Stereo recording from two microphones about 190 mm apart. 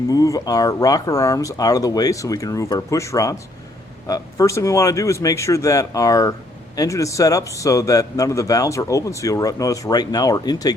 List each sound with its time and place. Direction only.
0.1 s a man's voice: 20° left (ahead or behind)